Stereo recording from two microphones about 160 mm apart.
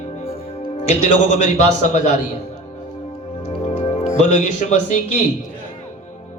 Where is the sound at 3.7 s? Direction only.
45° left (ahead or behind).